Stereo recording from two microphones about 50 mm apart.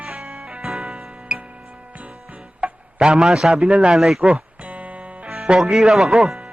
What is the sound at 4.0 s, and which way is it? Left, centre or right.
Speech, centre.